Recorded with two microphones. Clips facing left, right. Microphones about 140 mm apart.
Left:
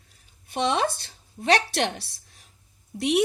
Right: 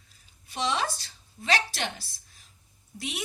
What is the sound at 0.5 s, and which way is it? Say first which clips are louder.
Speech: left 5 dB; 55° left (ahead or behind).